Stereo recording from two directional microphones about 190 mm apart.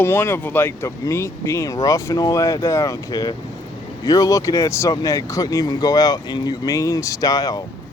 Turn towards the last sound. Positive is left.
turn(degrees=20)  # may be behind; listen again after turning